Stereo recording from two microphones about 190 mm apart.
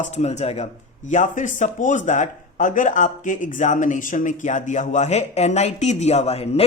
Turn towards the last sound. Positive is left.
turn(degrees=30)  # may be behind; listen again after turning